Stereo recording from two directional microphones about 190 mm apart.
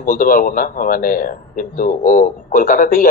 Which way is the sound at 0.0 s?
45° left (ahead or behind).